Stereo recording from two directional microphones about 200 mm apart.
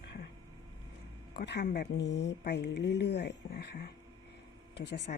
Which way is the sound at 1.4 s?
60° left (ahead or behind).